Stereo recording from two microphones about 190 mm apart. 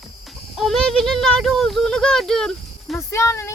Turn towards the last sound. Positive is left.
turn(degrees=15)  # may be behind; listen again after turning